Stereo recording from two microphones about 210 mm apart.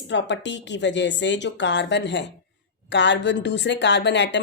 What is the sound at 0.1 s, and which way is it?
A woman's voice, 55° left (ahead or behind).